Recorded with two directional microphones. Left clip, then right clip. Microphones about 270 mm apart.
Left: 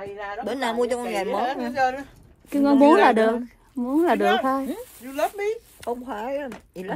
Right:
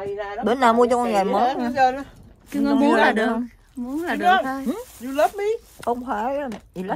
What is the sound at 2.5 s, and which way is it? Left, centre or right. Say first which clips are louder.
Speech: left 3 dB; centre.